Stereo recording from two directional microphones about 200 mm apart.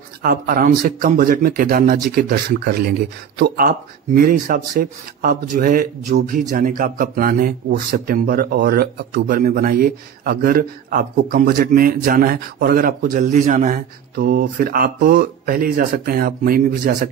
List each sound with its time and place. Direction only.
0.2 s speech: 45° right (ahead or behind)